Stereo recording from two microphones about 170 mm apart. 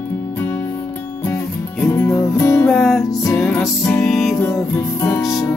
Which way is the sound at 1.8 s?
15° left (ahead or behind).